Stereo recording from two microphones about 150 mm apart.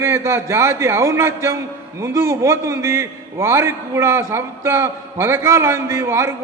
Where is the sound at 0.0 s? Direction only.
15° right (ahead or behind).